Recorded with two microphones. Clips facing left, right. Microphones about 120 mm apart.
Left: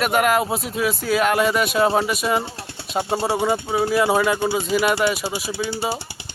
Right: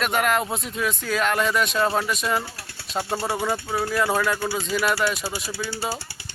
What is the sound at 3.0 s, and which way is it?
A man's voice, 20° left (ahead or behind).